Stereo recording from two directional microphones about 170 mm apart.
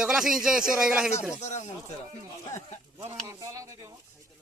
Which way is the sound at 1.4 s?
45° left (ahead or behind).